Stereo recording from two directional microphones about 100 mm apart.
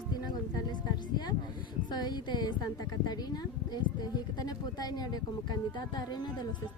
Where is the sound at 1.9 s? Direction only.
45° left (ahead or behind).